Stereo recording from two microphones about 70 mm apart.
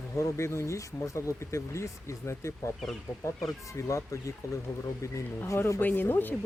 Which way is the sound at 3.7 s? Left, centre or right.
Left.